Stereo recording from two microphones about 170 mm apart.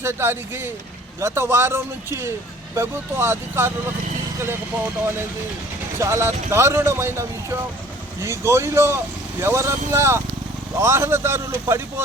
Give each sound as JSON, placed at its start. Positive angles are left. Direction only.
{"t": 0.0, "sound": "speech", "side_deg": -15}
{"t": 6.0, "sound": "speech", "side_deg": -15}